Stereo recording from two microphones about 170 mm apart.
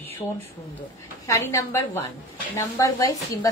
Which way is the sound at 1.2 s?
15° left (ahead or behind).